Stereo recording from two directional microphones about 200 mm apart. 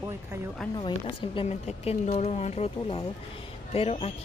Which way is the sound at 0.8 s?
25° left (ahead or behind).